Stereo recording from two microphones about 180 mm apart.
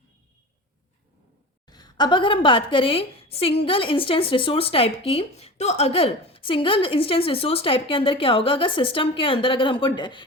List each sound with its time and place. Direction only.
1.6 s a woman's voice: 20° left (ahead or behind)